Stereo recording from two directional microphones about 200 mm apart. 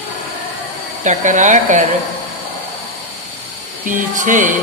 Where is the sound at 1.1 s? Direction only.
40° right (ahead or behind).